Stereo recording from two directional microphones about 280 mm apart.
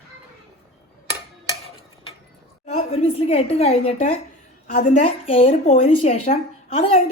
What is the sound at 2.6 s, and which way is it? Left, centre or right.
A woman's voice, left.